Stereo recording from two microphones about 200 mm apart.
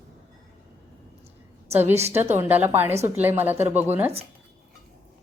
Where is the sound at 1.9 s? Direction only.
30° right (ahead or behind).